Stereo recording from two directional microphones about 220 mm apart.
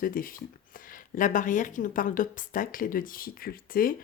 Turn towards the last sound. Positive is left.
turn(degrees=40)  # may be behind; listen again after turning